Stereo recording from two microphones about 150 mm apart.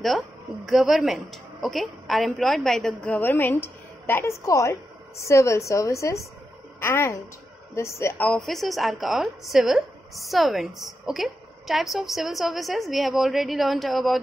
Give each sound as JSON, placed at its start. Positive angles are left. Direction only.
{"t": 0.7, "sound": "a woman's voice", "side_deg": 0}
{"t": 3.2, "sound": "a woman's voice", "side_deg": 15}